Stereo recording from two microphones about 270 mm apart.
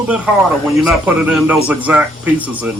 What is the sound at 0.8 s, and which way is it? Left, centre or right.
Speech, centre.